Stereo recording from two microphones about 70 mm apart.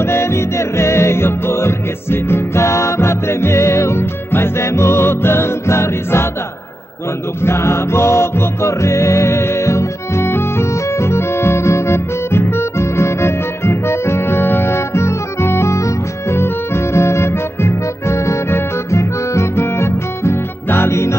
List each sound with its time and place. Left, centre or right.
0.0 s music: left
7.4 s music: left